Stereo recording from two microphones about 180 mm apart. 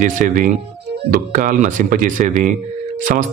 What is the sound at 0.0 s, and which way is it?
Speech, 45° right (ahead or behind).